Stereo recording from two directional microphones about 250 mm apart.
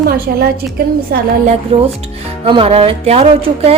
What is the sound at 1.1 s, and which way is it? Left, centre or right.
A woman's voice, right.